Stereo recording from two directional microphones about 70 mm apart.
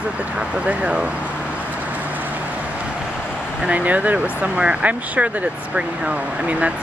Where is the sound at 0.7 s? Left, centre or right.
Centre.